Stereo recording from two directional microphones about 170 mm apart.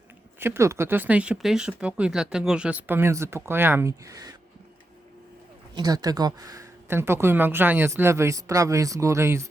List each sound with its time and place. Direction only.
0.3 s speech: 15° right (ahead or behind)
5.7 s speech: 25° right (ahead or behind)